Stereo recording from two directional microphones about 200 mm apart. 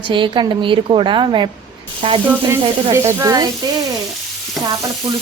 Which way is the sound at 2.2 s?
10° right (ahead or behind).